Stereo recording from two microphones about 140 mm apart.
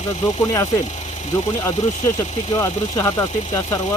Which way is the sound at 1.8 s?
60° left (ahead or behind).